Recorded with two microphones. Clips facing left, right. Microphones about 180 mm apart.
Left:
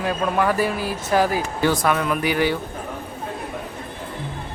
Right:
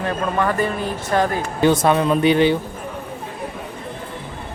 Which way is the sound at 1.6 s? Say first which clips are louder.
Right 6 dB; 25° right (ahead or behind).